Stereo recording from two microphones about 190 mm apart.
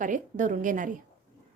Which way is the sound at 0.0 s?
40° right (ahead or behind).